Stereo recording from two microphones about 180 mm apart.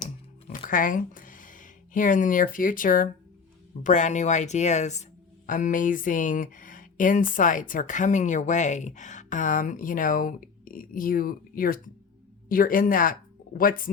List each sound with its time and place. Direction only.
0.6 s speech: 50° left (ahead or behind)